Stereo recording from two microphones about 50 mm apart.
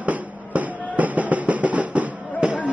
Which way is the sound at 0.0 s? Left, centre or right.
Right.